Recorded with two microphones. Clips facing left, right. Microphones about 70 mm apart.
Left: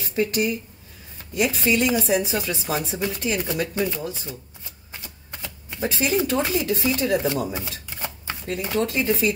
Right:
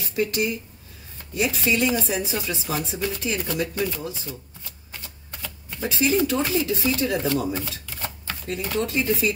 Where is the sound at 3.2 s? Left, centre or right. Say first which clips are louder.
Left 2 dB; left.